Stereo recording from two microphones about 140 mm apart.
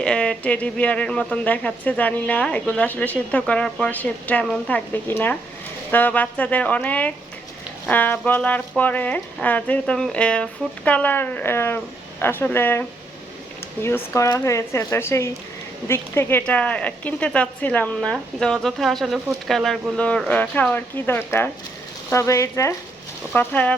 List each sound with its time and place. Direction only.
0.0 s speech: 5° left (ahead or behind)
13.8 s speech: 20° left (ahead or behind)